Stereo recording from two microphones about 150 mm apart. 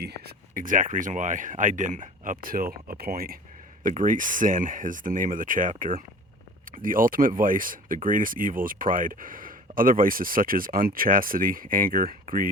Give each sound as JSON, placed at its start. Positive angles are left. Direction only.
{"t": 0.0, "sound": "speech", "side_deg": -90}
{"t": 3.8, "sound": "speech", "side_deg": -60}